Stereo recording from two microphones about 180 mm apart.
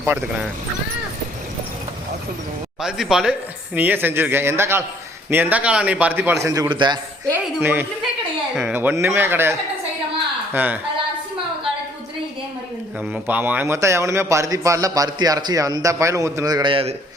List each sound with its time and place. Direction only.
0.0 s a man's voice: 10° right (ahead or behind)
2.8 s a man's voice: 5° right (ahead or behind); by 7.0 s 25° right (ahead or behind)
7.3 s a man's voice: 10° right (ahead or behind)
13.2 s a man's voice: 10° right (ahead or behind); by 16.9 s 30° right (ahead or behind)